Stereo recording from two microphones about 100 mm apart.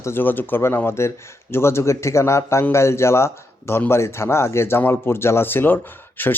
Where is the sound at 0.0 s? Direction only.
20° left (ahead or behind).